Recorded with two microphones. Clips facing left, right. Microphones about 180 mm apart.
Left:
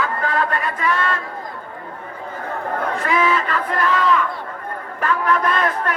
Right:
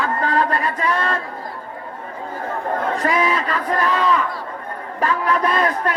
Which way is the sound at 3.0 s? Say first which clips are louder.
Left 2 dB; 35° right (ahead or behind).